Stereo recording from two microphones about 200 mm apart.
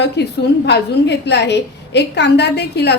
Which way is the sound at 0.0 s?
60° left (ahead or behind).